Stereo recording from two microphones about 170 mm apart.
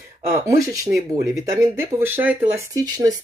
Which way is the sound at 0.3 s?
20° right (ahead or behind).